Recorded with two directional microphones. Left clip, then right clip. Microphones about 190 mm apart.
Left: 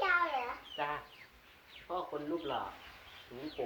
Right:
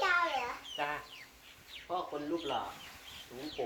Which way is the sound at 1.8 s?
15° right (ahead or behind).